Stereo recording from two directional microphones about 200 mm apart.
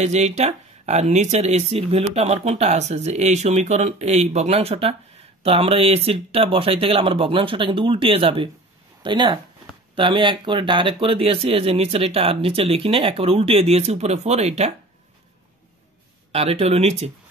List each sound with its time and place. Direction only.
0.0 s speech: 35° right (ahead or behind)
16.3 s speech: 30° right (ahead or behind)